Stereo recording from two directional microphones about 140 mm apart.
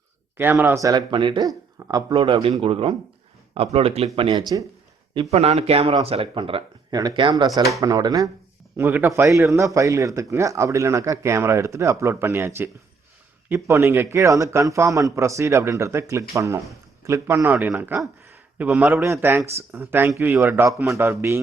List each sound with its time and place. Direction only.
0.3 s speech: 15° right (ahead or behind)
8.7 s a man's voice: 15° right (ahead or behind)